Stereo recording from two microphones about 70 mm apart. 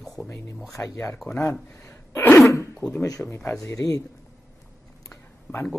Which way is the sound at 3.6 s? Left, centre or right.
Left.